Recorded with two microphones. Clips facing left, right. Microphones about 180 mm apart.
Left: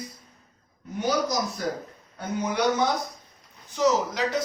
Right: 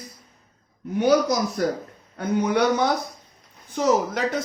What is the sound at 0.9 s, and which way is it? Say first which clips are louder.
Speech: right 6 dB; 60° right (ahead or behind).